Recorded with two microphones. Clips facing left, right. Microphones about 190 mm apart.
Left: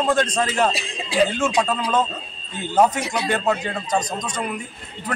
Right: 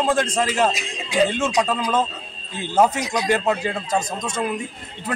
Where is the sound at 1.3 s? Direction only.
25° right (ahead or behind).